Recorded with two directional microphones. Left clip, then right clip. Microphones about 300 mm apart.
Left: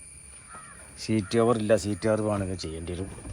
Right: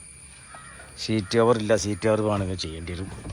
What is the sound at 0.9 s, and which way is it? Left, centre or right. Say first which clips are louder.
Speech: right 3 dB; centre.